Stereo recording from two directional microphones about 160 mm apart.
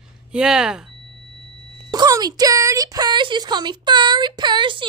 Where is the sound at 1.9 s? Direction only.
25° right (ahead or behind).